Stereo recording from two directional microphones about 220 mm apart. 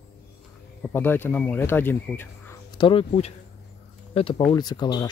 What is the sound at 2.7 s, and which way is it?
Speech, 25° left (ahead or behind).